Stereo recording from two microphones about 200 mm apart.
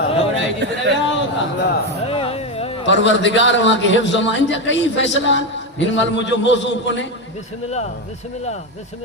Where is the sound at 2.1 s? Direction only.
30° left (ahead or behind).